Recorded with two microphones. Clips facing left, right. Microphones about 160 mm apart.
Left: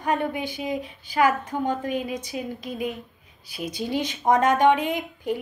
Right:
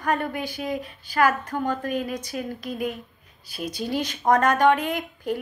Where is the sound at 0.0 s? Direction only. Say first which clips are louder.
Left 1 dB; 20° left (ahead or behind).